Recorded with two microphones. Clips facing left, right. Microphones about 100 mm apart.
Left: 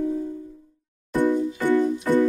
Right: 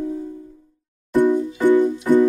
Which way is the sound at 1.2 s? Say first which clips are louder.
Right 4 dB; 15° right (ahead or behind).